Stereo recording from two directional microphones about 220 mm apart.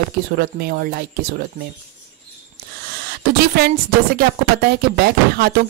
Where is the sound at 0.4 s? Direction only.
45° right (ahead or behind).